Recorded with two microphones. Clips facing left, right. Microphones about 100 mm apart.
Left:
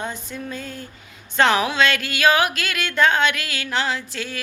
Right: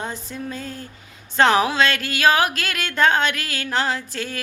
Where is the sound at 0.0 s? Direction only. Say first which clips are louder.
Even; 35° right (ahead or behind).